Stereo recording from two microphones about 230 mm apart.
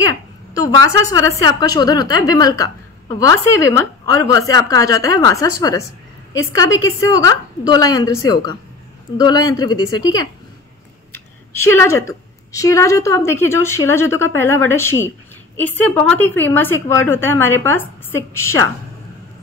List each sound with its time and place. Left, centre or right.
1.1 s a woman's voice: centre